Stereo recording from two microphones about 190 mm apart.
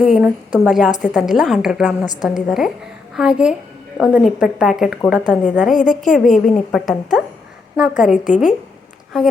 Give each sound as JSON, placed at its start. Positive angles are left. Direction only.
{"t": 0.0, "sound": "a woman's voice", "side_deg": -5}
{"t": 5.7, "sound": "a woman's voice", "side_deg": 45}
{"t": 6.0, "sound": "a woman's voice", "side_deg": 0}